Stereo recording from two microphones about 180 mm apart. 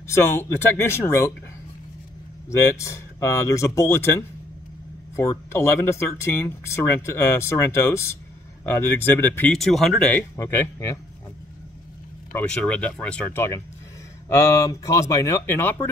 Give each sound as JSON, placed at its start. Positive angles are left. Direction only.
{"t": 0.0, "sound": "speech", "side_deg": 15}
{"t": 2.5, "sound": "speech", "side_deg": 15}
{"t": 12.3, "sound": "speech", "side_deg": 5}